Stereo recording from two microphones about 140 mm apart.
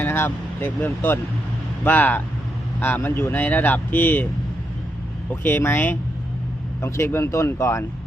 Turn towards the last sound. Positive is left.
turn(degrees=20)  # may be behind; listen again after turning